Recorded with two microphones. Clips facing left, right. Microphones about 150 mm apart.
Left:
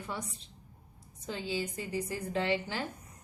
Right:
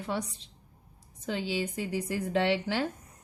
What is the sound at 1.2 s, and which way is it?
A woman's voice, 85° right.